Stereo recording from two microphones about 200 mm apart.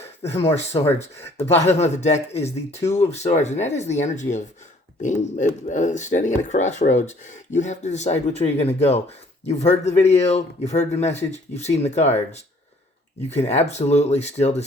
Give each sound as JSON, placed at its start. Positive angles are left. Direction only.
{"t": 0.2, "sound": "speech", "side_deg": 30}